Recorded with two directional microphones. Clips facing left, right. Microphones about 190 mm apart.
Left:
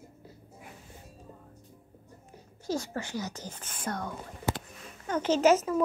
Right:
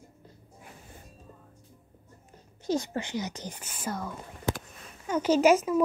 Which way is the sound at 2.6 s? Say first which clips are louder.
Right 3 dB; 20° right (ahead or behind).